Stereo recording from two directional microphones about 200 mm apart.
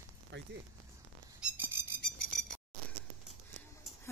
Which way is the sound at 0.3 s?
60° right (ahead or behind).